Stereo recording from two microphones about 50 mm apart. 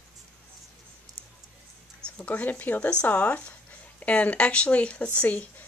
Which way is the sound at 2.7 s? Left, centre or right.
Left.